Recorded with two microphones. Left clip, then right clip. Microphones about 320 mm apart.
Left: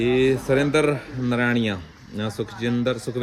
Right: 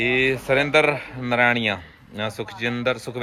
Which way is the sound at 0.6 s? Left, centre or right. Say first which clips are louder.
Right 2 dB; centre.